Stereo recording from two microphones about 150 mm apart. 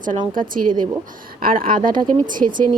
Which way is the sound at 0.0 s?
65° right (ahead or behind).